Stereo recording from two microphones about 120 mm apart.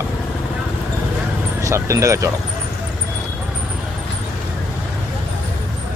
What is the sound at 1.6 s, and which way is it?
Speech, 25° right (ahead or behind).